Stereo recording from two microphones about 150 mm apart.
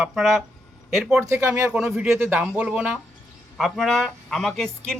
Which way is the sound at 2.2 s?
15° right (ahead or behind).